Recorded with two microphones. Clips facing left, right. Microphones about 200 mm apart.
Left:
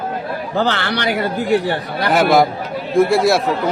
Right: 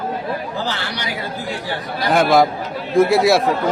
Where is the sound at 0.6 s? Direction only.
65° left (ahead or behind).